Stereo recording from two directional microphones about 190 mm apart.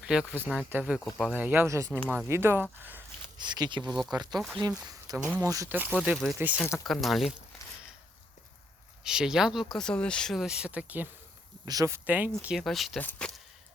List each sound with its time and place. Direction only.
0.0 s speech: 5° right (ahead or behind)
3.3 s speech: 25° right (ahead or behind)
3.8 s speech: centre (ahead or behind)
4.1 s speech: 20° right (ahead or behind); by 7.4 s centre (ahead or behind)
9.0 s speech: 5° right (ahead or behind)